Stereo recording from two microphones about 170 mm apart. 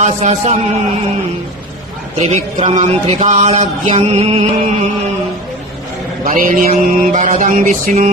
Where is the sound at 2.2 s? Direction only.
40° right (ahead or behind).